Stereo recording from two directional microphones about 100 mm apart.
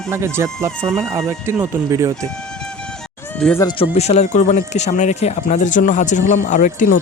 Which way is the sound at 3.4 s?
5° left (ahead or behind).